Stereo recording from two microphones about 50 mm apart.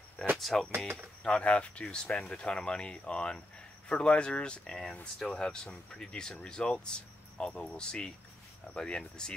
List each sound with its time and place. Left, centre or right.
0.2 s a sound: centre
0.7 s speech: right
1.2 s speech: left